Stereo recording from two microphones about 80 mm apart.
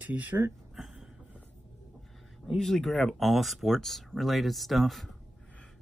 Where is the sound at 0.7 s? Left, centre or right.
Centre.